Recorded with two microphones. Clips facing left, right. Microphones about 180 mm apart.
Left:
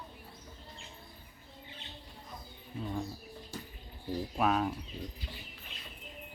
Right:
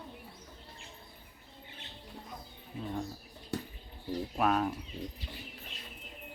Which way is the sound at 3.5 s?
65° right (ahead or behind).